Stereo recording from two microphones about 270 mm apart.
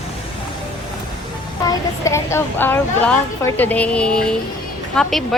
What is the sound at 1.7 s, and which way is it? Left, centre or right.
A woman's voice, centre.